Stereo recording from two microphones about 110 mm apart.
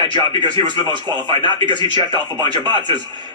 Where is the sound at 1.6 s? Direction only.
45° right (ahead or behind).